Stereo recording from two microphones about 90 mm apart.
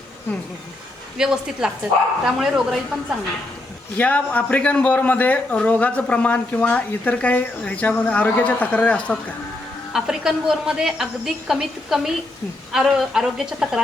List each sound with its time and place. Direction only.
1.2 s a woman's voice: 10° right (ahead or behind)
3.9 s a man's voice: 15° left (ahead or behind)
9.9 s speech: 5° right (ahead or behind)